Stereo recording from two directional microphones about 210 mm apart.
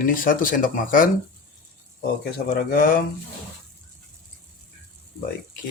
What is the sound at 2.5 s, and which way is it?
Speech, 45° left (ahead or behind).